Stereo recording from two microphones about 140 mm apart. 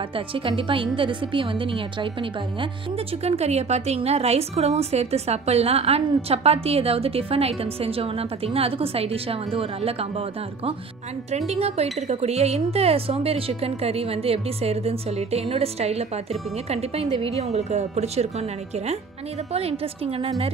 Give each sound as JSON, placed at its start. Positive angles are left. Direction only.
{"t": 0.5, "sound": "a woman's voice", "side_deg": -40}
{"t": 3.3, "sound": "a woman's voice", "side_deg": -50}
{"t": 11.3, "sound": "a woman's voice", "side_deg": -50}
{"t": 20.2, "sound": "a woman's voice", "side_deg": -45}